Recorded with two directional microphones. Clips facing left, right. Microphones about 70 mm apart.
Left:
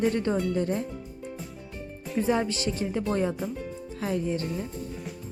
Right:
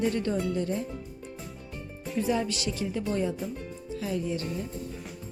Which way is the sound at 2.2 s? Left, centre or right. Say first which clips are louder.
Left 2 dB; left.